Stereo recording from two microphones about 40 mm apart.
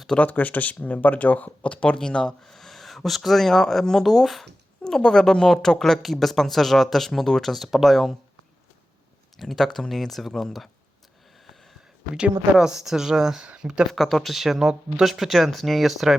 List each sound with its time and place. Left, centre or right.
0.2 s speech: left
1.7 s speech: left
2.0 s speech: centre
2.4 s speech: centre
4.8 s speech: centre
9.4 s speech: centre
12.1 s speech: centre
13.9 s speech: centre